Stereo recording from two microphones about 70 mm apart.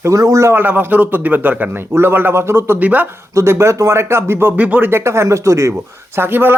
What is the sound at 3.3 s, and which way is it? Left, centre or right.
Speech, right.